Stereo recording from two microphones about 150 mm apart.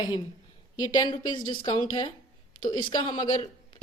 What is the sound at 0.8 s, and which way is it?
A woman's voice, 25° left (ahead or behind).